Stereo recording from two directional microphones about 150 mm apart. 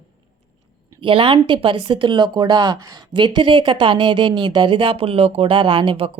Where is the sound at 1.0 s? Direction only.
35° right (ahead or behind).